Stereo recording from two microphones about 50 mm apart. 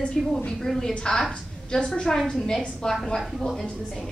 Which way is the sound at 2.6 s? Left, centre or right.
Centre.